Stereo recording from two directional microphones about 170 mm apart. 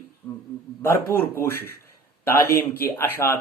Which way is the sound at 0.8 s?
15° left (ahead or behind).